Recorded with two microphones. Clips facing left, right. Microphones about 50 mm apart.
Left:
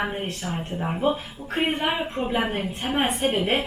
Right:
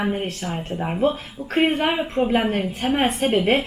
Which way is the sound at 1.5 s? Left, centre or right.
Centre.